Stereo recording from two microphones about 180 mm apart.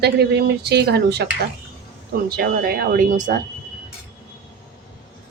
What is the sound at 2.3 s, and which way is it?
Speech, 55° right (ahead or behind).